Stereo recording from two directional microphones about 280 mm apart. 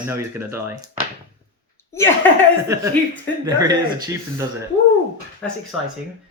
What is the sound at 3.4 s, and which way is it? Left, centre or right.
Speech, centre.